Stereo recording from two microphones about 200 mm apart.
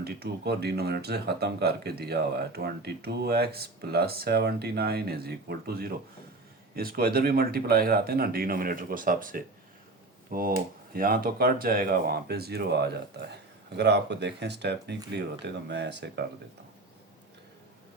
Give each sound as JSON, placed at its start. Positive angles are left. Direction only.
{"t": 0.0, "sound": "speech", "side_deg": -50}